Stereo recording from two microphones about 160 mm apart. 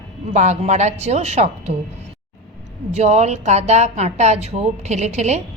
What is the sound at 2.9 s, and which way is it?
A man's voice, 45° right (ahead or behind).